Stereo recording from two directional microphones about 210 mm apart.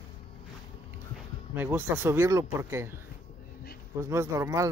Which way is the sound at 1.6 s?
10° right (ahead or behind).